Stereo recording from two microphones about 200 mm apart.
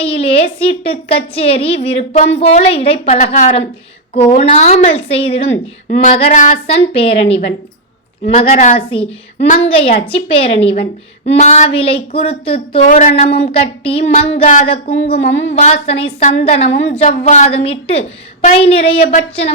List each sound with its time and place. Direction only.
0.0 s a woman's voice: 30° left (ahead or behind)
8.2 s speech: 45° left (ahead or behind)
8.9 s a woman's voice: 25° left (ahead or behind)
15.2 s speech: 65° left (ahead or behind)
15.5 s a woman's voice: 35° left (ahead or behind)